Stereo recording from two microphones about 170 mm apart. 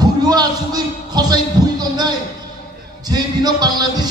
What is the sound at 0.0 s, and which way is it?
Music, 25° right (ahead or behind).